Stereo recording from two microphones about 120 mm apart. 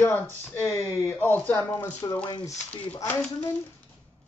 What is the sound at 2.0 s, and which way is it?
Speech, 35° left (ahead or behind).